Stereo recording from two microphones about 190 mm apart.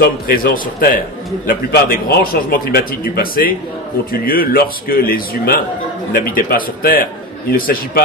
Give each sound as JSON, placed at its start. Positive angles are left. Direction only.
{"t": 0.0, "sound": "a man's voice", "side_deg": 50}